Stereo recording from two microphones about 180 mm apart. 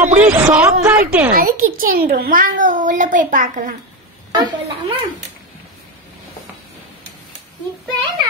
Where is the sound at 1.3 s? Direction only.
50° right (ahead or behind).